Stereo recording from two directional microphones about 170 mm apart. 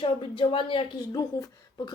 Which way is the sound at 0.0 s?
30° left (ahead or behind).